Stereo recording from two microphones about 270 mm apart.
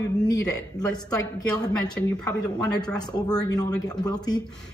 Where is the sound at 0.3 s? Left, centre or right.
Centre.